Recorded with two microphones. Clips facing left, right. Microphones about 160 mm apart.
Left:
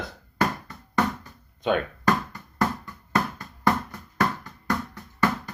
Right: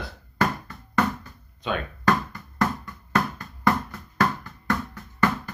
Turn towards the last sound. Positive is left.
turn(degrees=10)  # may be behind; listen again after turning